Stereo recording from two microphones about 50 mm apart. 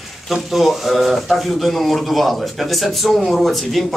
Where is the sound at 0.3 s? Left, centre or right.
Centre.